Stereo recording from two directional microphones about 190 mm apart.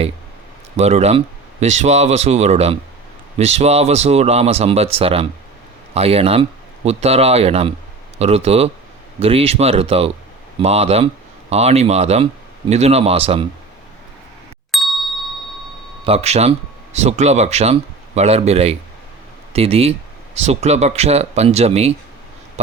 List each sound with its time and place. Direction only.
0.8 s speech: 35° right (ahead or behind)
14.7 s ding: centre (ahead or behind)
16.0 s speech: 35° right (ahead or behind)